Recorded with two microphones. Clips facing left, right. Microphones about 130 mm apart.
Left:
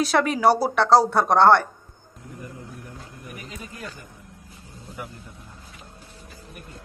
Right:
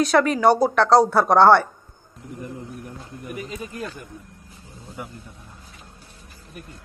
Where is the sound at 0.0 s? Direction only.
Centre (ahead or behind).